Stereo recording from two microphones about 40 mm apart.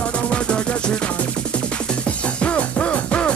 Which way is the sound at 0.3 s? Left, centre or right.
Left.